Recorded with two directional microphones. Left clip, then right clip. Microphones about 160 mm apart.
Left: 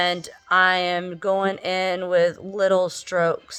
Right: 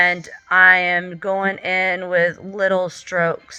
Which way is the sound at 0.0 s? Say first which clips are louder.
Right 6 dB; 45° left (ahead or behind).